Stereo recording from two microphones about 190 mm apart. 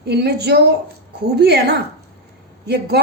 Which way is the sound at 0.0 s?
60° right (ahead or behind).